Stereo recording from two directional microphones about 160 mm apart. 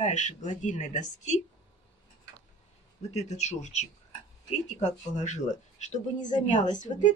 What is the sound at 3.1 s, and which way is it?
Speech, 45° left (ahead or behind).